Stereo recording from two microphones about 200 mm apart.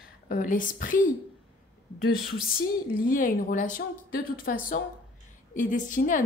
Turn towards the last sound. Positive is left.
turn(degrees=40)  # may be behind; listen again after turning